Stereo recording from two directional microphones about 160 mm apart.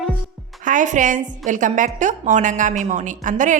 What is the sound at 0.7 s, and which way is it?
A woman's voice, 50° right (ahead or behind).